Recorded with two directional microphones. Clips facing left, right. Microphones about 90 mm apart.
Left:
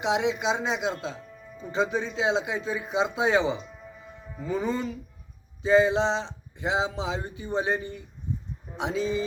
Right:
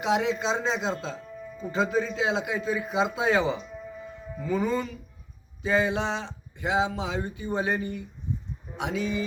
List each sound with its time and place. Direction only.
0.0 s speech: 20° left (ahead or behind)